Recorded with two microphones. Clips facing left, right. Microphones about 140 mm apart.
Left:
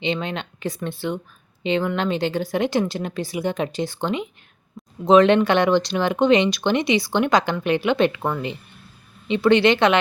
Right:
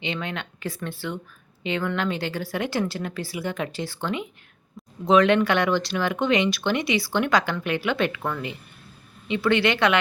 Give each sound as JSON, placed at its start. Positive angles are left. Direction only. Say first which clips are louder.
{"t": 0.0, "sound": "speech", "louder": "left 5 dB", "side_deg": 20}